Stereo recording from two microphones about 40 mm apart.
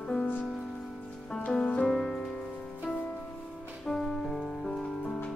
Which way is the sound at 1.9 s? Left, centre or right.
Centre.